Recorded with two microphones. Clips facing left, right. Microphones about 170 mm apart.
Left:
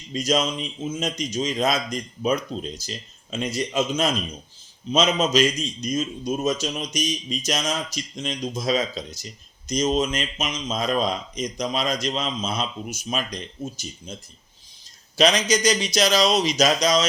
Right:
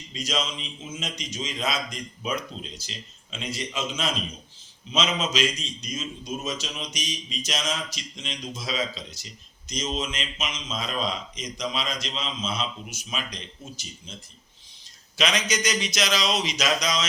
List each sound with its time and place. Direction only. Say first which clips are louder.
0.1 s a man's voice: left 8 dB; 45° left (ahead or behind)
15.2 s speech: left 7 dB; 35° left (ahead or behind)